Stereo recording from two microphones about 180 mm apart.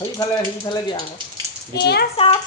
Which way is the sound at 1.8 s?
65° left (ahead or behind).